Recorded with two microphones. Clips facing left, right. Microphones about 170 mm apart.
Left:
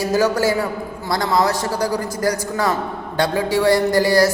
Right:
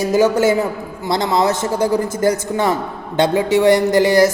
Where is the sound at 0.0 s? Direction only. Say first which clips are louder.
Right 3 dB; 20° right (ahead or behind).